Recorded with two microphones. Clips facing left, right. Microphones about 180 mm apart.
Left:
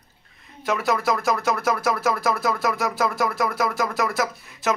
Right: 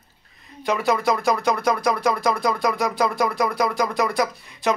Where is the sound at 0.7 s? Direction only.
Centre (ahead or behind).